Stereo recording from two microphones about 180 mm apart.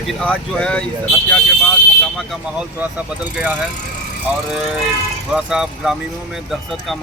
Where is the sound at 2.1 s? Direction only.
Centre (ahead or behind).